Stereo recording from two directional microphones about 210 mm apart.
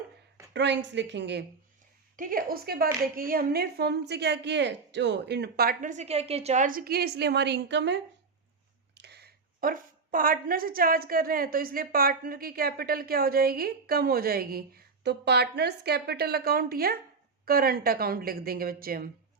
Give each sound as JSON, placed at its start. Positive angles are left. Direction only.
{"t": 0.5, "sound": "a woman's voice", "side_deg": -55}
{"t": 2.1, "sound": "speech", "side_deg": -40}
{"t": 9.0, "sound": "speech", "side_deg": -50}